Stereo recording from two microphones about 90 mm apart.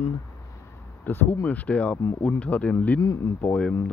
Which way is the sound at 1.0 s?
20° left (ahead or behind).